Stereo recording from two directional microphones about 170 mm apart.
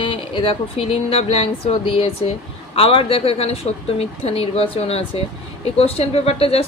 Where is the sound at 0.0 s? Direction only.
30° left (ahead or behind).